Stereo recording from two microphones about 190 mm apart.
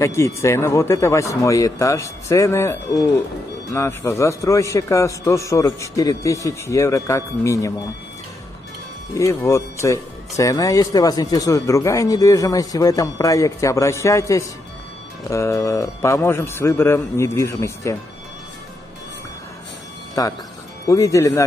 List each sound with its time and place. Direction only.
0.0 s speech: 15° left (ahead or behind)
9.1 s speech: 15° left (ahead or behind)
20.2 s speech: 20° left (ahead or behind)